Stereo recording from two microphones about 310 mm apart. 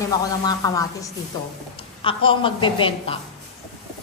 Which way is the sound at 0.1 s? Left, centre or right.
Centre.